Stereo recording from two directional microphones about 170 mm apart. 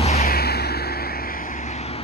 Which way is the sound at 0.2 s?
65° left (ahead or behind).